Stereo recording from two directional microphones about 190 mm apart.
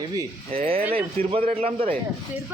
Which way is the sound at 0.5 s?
30° right (ahead or behind).